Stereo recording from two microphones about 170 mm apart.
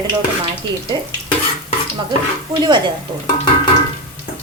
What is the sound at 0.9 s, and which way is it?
Speech, 25° right (ahead or behind).